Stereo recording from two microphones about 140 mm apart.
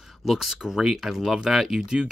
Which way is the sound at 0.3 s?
Centre (ahead or behind).